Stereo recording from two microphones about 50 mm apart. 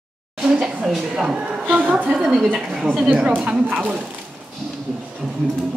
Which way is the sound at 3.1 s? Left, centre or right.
Right.